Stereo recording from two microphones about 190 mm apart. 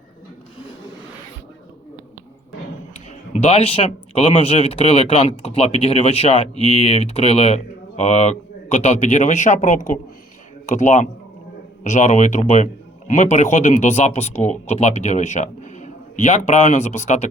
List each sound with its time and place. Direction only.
3.3 s speech: 35° left (ahead or behind)